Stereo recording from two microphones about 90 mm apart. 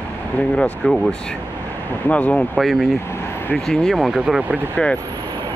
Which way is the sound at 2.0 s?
15° left (ahead or behind).